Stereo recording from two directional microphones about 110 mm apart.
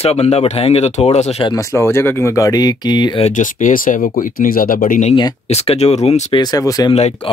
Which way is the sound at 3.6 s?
90° left.